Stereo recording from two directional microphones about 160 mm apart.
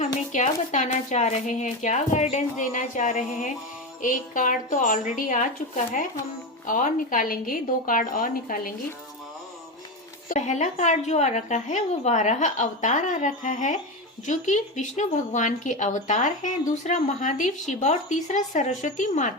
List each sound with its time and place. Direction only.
0.3 s a woman's voice: 50° left (ahead or behind)
10.2 s a woman's voice: 50° left (ahead or behind)